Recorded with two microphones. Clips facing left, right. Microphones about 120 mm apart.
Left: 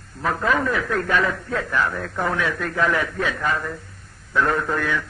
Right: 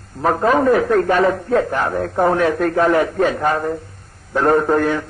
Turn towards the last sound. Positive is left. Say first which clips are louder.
# right 8 dB
turn(degrees=-40)  # may be behind; listen again after turning